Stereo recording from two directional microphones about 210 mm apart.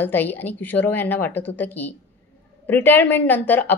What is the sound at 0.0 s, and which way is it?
Speech, 10° left (ahead or behind).